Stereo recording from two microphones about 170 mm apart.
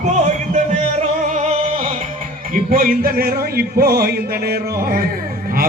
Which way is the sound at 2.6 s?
55° right (ahead or behind).